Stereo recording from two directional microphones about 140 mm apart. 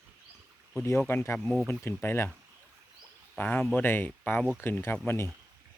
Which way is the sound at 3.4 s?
15° left (ahead or behind).